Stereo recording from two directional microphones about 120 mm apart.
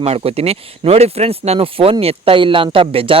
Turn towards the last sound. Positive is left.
turn(degrees=-50)  # may be behind; listen again after turning